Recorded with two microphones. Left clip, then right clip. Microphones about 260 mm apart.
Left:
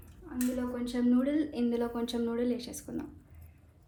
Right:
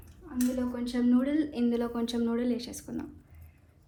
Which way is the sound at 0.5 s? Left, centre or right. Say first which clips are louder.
Right 2 dB; right.